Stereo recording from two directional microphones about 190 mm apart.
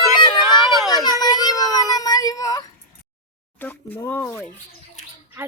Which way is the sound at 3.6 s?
10° left (ahead or behind).